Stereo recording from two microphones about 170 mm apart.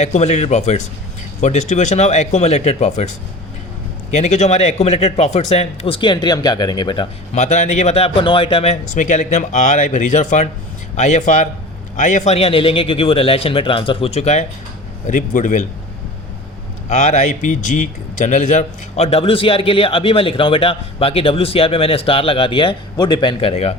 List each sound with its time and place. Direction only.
0.0 s a man's voice: 40° left (ahead or behind)
4.1 s a man's voice: 40° left (ahead or behind); by 7.1 s 25° left (ahead or behind)
7.3 s a man's voice: 45° left (ahead or behind)
16.9 s a man's voice: 45° left (ahead or behind)